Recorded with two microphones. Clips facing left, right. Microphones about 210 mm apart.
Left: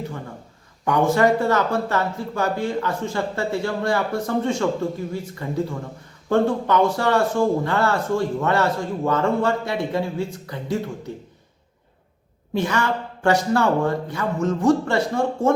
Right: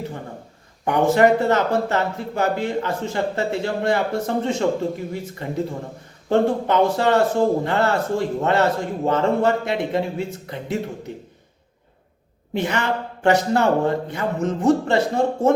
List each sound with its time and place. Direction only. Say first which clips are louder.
0.9 s speech: right 2 dB; 20° right (ahead or behind)
12.5 s speech: even; 20° right (ahead or behind)